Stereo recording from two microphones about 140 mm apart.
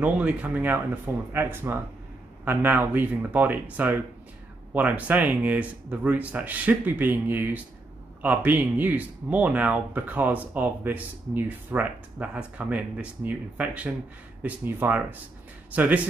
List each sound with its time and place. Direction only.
0.0 s speech: 10° right (ahead or behind)